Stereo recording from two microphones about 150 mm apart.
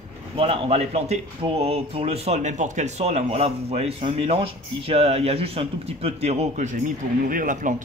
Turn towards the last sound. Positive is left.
turn(degrees=-60)  # may be behind; listen again after turning